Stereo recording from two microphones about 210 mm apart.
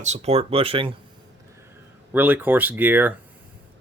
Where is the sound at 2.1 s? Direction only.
10° right (ahead or behind).